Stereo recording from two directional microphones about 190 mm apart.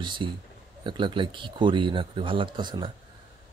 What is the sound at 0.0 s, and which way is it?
Speech, 25° right (ahead or behind).